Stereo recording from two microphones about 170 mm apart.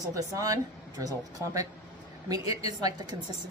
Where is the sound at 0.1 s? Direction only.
20° right (ahead or behind).